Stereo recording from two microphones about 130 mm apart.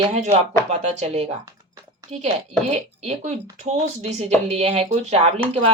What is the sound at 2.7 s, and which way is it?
Speech, 60° right (ahead or behind).